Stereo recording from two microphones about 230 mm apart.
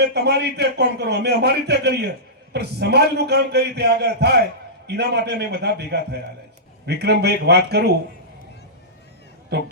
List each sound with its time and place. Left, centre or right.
0.0 s a man's voice: right
9.5 s a man's voice: right